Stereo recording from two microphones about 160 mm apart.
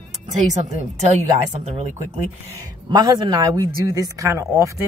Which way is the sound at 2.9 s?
25° right (ahead or behind).